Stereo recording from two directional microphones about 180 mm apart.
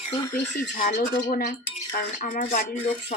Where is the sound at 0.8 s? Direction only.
55° left (ahead or behind).